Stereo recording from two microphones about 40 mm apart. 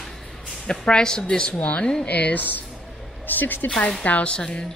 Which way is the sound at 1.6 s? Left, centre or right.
Left.